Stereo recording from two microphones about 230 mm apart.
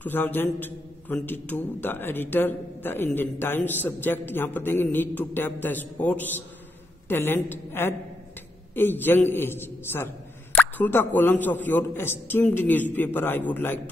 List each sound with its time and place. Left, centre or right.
0.0 s a man's voice: centre